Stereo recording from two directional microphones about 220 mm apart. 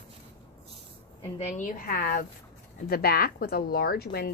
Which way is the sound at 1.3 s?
40° left (ahead or behind).